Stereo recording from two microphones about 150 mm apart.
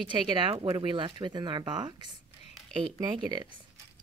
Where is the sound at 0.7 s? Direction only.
35° right (ahead or behind).